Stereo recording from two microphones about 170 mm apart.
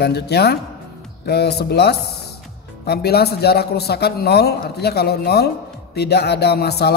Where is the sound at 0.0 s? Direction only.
75° left (ahead or behind).